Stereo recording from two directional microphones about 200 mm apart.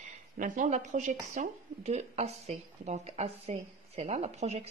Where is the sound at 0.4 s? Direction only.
40° right (ahead or behind).